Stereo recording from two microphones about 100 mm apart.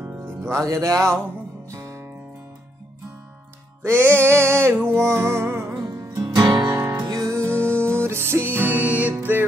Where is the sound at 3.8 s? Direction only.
25° right (ahead or behind).